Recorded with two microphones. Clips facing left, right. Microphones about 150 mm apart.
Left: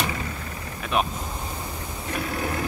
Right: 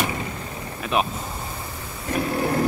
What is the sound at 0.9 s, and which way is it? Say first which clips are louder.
Speech: right 1 dB; centre (ahead or behind).